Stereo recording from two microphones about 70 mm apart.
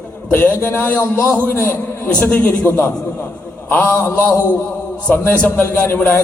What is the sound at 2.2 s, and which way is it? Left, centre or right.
A man's voice, left.